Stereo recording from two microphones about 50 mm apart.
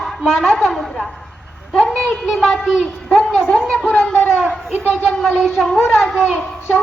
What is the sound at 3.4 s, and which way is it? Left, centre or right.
Speech, left.